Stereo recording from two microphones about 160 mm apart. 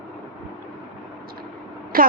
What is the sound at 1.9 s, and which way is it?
Speech, 65° right (ahead or behind).